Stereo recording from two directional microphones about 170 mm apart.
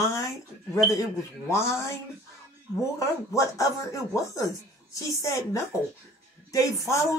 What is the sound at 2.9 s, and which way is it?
Speech, 20° left (ahead or behind).